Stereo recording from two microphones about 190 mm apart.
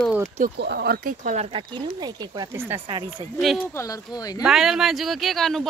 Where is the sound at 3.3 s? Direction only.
5° right (ahead or behind).